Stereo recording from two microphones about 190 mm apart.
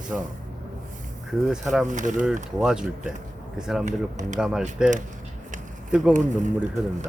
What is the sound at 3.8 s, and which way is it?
Speech, 40° right (ahead or behind).